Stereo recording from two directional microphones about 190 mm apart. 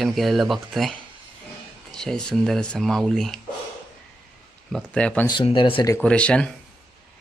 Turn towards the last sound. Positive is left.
turn(degrees=5)  # may be behind; listen again after turning